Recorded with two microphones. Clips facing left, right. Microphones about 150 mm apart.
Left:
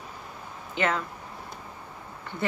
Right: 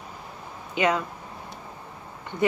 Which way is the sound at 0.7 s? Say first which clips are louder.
Right 4 dB; 15° right (ahead or behind).